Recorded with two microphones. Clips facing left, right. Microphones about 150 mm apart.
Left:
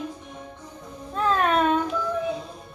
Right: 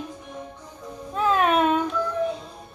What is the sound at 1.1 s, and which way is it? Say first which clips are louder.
Music: right 1 dB; 10° right (ahead or behind).